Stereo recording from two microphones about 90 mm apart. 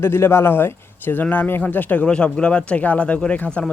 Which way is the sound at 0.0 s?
30° left (ahead or behind).